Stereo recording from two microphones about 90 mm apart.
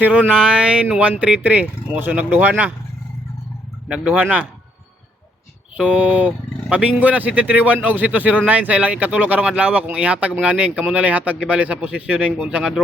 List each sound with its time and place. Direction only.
0.0 s speech: 15° right (ahead or behind)
3.8 s speech: 10° right (ahead or behind)
5.7 s speech: 15° right (ahead or behind)